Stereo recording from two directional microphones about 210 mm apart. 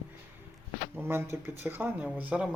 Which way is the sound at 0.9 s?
10° right (ahead or behind).